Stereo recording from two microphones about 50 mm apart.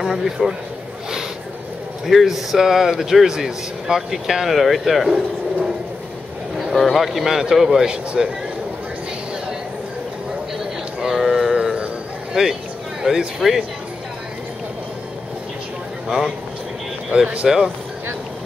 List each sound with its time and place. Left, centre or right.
0.0 s speech: centre
2.0 s speech: centre
6.6 s a man's voice: centre
11.0 s a sound: centre
12.4 s a man's voice: centre
16.1 s speech: centre
17.4 s a man's voice: centre